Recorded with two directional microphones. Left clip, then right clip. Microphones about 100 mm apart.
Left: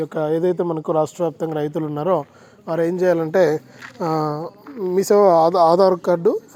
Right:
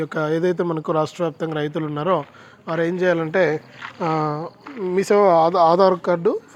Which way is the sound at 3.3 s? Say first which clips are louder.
Left 2 dB; 40° left (ahead or behind).